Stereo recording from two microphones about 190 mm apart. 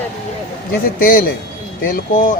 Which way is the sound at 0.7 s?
50° left (ahead or behind).